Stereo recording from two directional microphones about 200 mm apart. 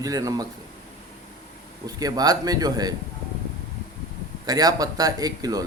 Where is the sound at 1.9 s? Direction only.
20° right (ahead or behind).